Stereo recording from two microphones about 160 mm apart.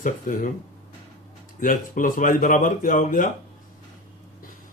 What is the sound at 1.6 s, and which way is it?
Speech, 60° left (ahead or behind).